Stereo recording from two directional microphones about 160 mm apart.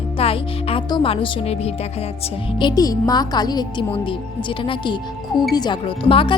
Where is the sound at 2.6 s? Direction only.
25° left (ahead or behind).